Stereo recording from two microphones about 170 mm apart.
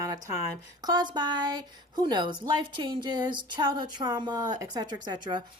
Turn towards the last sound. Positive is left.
turn(degrees=-25)  # may be behind; listen again after turning